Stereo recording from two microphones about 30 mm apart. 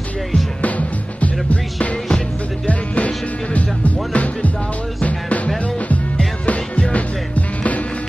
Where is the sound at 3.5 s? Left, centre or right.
Left.